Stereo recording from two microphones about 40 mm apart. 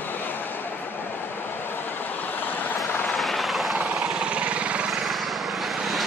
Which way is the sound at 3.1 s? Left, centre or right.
Centre.